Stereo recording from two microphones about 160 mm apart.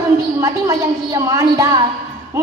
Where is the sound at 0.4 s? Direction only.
20° right (ahead or behind).